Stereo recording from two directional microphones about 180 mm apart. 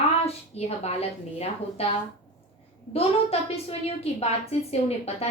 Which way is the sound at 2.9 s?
35° left (ahead or behind).